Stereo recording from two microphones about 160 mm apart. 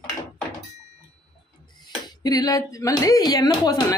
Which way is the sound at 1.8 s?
25° left (ahead or behind).